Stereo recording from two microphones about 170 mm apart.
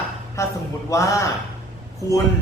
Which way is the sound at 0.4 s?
15° left (ahead or behind).